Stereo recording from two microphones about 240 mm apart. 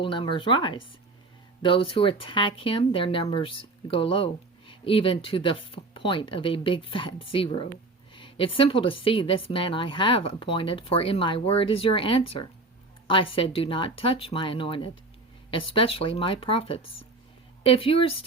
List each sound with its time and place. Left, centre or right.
0.0 s speech: left